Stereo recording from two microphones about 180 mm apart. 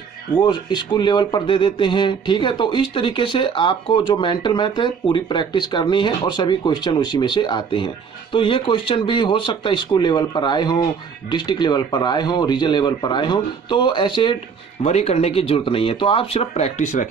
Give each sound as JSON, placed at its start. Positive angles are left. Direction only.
{"t": 0.4, "sound": "speech", "side_deg": 25}